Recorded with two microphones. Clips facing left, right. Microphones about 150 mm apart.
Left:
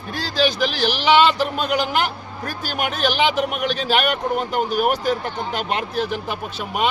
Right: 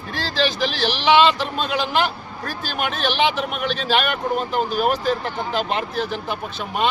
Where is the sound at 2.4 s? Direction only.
10° left (ahead or behind).